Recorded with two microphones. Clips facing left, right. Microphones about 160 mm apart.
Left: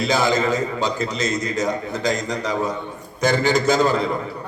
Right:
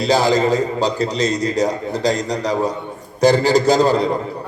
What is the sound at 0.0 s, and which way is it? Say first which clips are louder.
A man's voice: right 4 dB; 35° right (ahead or behind).